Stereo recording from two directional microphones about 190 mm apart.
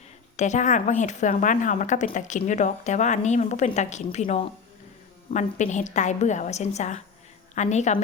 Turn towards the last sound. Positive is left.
turn(degrees=35)  # may be behind; listen again after turning